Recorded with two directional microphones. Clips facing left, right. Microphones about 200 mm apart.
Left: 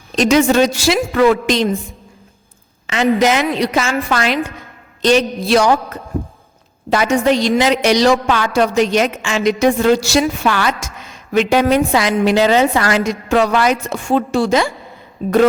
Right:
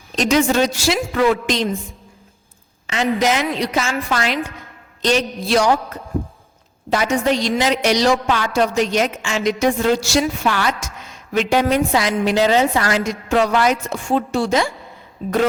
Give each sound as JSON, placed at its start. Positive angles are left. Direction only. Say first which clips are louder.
{"t": 0.2, "sound": "a woman's voice", "louder": "left 4 dB", "side_deg": 75}
{"t": 2.8, "sound": "a woman's voice", "louder": "left 4 dB", "side_deg": 75}